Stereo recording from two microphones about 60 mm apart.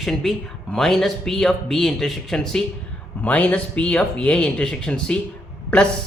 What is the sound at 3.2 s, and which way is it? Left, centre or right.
Speech, left.